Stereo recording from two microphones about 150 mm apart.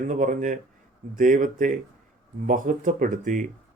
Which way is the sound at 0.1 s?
60° right (ahead or behind).